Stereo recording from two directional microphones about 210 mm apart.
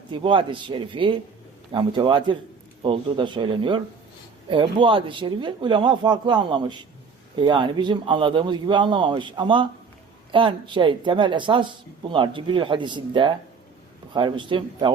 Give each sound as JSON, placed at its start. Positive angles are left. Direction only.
{"t": 0.1, "sound": "speech", "side_deg": -25}